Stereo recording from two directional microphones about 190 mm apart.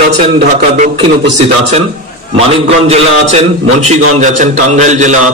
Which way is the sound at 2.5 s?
30° right (ahead or behind).